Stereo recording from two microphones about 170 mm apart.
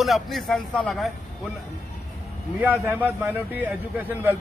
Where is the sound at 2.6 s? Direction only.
10° right (ahead or behind).